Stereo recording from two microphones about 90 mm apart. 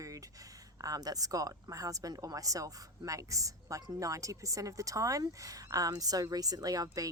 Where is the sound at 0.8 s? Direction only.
40° right (ahead or behind).